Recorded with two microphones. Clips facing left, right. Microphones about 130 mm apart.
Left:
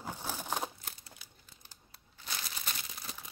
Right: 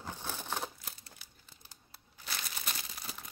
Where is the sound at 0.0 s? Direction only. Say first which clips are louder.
Left 2 dB; 10° left (ahead or behind).